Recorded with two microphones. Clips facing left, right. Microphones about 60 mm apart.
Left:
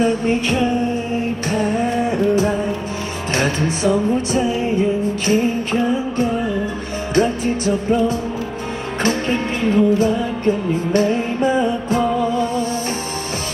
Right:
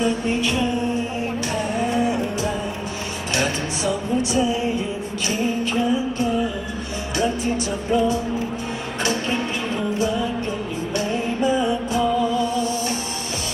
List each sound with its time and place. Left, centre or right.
0.0 s music: left